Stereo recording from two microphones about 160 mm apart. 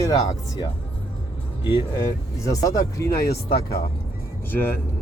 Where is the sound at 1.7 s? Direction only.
25° left (ahead or behind).